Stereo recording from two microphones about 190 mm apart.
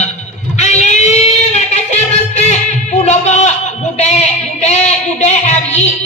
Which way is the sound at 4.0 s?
35° left (ahead or behind).